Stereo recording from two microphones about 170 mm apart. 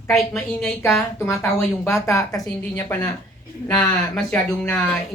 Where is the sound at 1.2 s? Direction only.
15° left (ahead or behind).